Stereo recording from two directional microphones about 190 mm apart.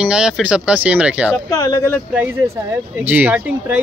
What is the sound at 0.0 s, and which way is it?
Speech, 5° right (ahead or behind).